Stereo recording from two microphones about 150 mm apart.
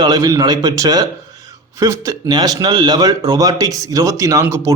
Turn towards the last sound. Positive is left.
turn(degrees=-20)  # may be behind; listen again after turning